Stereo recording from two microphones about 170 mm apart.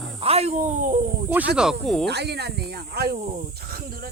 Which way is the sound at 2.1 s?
75° right (ahead or behind).